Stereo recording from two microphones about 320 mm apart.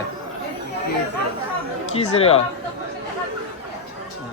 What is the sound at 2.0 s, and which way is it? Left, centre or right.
Speech, centre.